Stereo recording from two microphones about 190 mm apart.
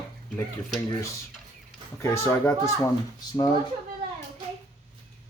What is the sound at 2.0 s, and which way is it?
Speech, 15° left (ahead or behind).